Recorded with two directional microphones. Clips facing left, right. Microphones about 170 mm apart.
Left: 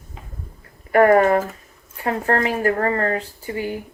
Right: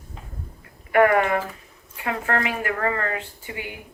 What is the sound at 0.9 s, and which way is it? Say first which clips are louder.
A woman's voice: left 4 dB; 40° left (ahead or behind).